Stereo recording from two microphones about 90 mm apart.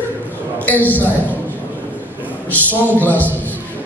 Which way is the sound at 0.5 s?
20° left (ahead or behind).